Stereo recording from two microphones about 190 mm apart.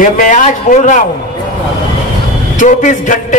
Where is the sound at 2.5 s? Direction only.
40° left (ahead or behind).